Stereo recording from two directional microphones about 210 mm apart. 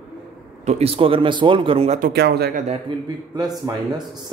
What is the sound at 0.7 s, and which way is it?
A man's voice, 30° right (ahead or behind).